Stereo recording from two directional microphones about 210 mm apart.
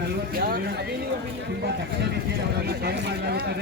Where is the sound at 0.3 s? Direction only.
45° right (ahead or behind).